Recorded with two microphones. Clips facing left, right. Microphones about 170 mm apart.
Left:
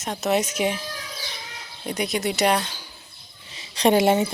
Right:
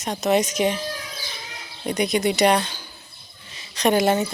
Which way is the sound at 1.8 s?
Centre (ahead or behind).